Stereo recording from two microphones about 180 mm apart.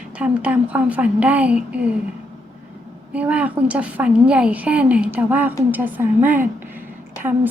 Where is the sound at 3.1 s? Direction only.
10° right (ahead or behind).